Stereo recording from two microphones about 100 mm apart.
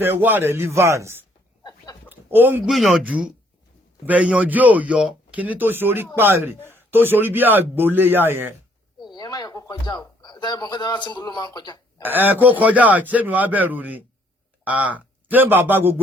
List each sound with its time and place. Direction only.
0.0 s a man's voice: 20° right (ahead or behind)
2.0 s a sound: 20° right (ahead or behind)
2.6 s speech: centre (ahead or behind)
3.0 s a man's voice: 15° right (ahead or behind)
9.1 s speech: 40° left (ahead or behind)
12.0 s speech: 20° right (ahead or behind)